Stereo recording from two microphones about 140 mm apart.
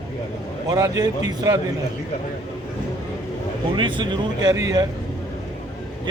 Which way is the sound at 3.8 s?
35° right (ahead or behind).